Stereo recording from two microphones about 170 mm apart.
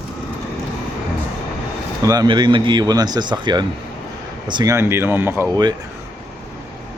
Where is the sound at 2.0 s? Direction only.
20° right (ahead or behind).